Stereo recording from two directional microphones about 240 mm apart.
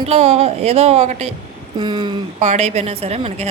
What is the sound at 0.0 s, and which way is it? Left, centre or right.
Speech, right.